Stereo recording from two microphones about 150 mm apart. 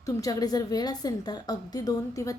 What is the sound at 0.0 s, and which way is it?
A woman's voice, 25° left (ahead or behind).